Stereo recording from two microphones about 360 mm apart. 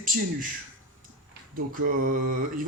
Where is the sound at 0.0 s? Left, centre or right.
Right.